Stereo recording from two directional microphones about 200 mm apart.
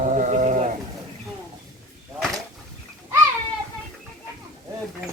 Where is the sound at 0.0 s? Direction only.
40° right (ahead or behind).